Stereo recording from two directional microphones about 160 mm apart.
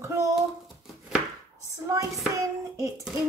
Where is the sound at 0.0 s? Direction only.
20° right (ahead or behind).